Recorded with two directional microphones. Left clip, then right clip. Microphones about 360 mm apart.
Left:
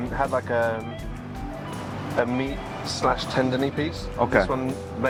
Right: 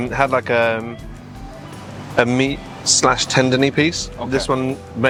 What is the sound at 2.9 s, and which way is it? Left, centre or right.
Speech, right.